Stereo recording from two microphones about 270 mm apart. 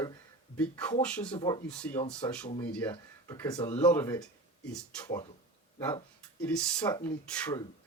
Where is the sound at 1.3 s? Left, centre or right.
Centre.